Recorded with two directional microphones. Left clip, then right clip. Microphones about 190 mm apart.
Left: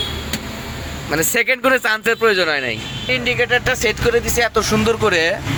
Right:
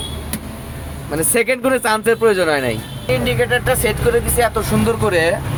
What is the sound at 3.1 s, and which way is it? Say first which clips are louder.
Speech: even; 15° left (ahead or behind).